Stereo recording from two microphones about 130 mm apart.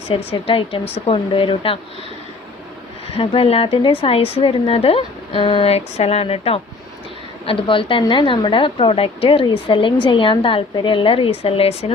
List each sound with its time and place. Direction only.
0.3 s speech: 45° left (ahead or behind)
3.2 s a woman's voice: 50° left (ahead or behind)